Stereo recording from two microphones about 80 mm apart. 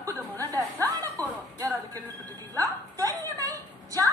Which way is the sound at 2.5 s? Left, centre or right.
Right.